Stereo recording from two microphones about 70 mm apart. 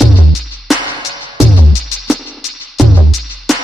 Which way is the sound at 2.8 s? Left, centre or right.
Centre.